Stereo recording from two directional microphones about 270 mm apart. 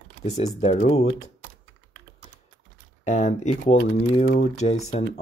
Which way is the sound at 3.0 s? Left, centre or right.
Left.